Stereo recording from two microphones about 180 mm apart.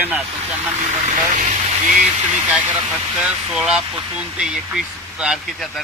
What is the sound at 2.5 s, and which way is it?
Speech, 5° right (ahead or behind).